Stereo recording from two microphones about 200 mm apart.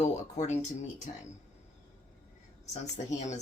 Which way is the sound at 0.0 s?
35° left (ahead or behind).